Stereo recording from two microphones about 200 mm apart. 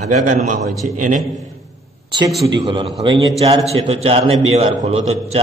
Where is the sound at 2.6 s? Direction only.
25° right (ahead or behind).